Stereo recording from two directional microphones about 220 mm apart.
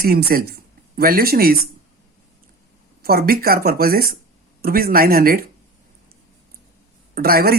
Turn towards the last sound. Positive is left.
turn(degrees=-45)  # may be behind; listen again after turning